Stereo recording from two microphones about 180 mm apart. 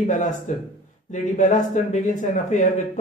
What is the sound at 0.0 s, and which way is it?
A man's voice, 40° left (ahead or behind).